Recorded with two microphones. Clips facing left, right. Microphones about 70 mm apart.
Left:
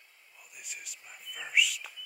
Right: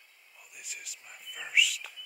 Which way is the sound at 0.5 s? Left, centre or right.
Centre.